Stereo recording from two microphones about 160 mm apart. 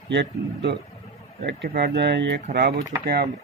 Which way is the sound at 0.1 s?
90° right.